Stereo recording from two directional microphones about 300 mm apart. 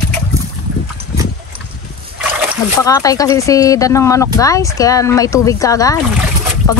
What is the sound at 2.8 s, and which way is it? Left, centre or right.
Speech, centre.